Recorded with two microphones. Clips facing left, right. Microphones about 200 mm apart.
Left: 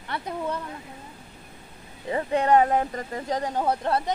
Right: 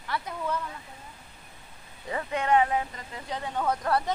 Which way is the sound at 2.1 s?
30° left (ahead or behind).